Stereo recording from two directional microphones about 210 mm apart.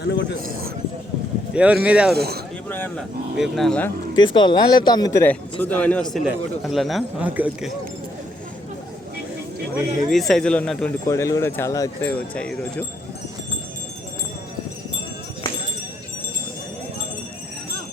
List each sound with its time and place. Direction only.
0.0 s a man's voice: 55° left (ahead or behind)
1.5 s speech: 5° right (ahead or behind)
2.1 s speech: 50° right (ahead or behind)
2.6 s speech: 10° left (ahead or behind)
4.1 s a man's voice: 20° left (ahead or behind); by 7.7 s 5° right (ahead or behind)
10.1 s speech: centre (ahead or behind)